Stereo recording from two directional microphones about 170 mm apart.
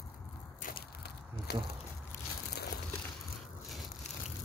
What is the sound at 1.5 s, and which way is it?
Speech, 70° left (ahead or behind).